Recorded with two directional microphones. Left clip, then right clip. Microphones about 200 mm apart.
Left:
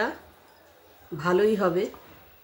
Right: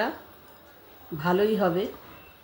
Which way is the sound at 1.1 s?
15° left (ahead or behind).